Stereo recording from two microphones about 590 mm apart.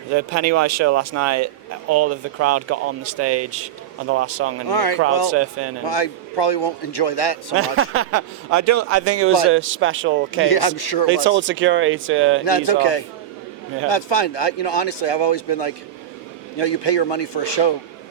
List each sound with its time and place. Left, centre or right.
0.1 s speech: right
4.7 s a man's voice: left
5.3 s speech: right
5.8 s a man's voice: left
7.8 s speech: right
10.4 s a man's voice: left
11.1 s speech: centre
12.5 s speech: left